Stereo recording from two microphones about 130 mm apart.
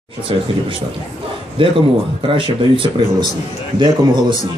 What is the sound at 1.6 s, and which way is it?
A man's voice, 40° right (ahead or behind).